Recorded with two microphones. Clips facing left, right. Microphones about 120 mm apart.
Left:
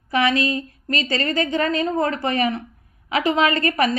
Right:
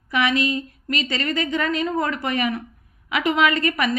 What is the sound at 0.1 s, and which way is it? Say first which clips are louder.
A woman's voice: left 2 dB; 35° left (ahead or behind).